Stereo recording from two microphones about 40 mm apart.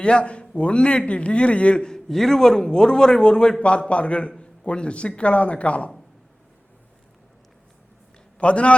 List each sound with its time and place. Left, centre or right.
0.0 s a man's voice: left
1.9 s a man's voice: centre; by 5.9 s left
8.4 s a man's voice: left